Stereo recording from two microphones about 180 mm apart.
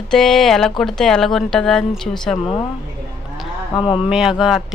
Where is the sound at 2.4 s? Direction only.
30° left (ahead or behind).